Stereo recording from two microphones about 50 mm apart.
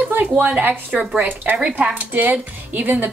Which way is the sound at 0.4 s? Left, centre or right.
Right.